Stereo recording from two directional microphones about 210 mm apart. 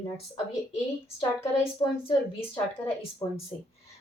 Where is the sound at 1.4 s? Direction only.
10° left (ahead or behind).